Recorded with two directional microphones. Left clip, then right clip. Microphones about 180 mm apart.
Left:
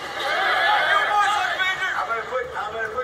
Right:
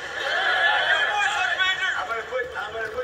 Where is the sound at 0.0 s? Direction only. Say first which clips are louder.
Left 1 dB; 15° left (ahead or behind).